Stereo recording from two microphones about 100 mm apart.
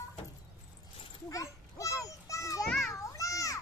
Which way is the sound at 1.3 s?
35° left (ahead or behind).